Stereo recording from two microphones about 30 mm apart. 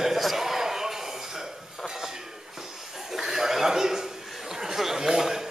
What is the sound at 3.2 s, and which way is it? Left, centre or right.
Chuckle, centre.